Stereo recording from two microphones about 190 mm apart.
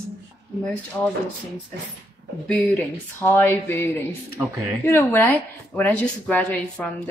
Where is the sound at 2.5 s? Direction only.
10° left (ahead or behind).